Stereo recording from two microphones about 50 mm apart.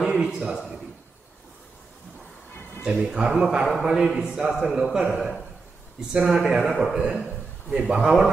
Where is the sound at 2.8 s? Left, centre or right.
Centre.